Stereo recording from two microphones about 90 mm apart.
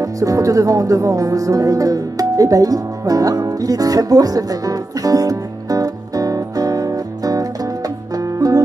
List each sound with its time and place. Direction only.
0.0 s music: 40° right (ahead or behind)